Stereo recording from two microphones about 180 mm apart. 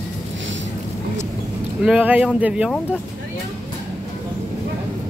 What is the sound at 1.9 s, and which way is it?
Speech, 10° right (ahead or behind).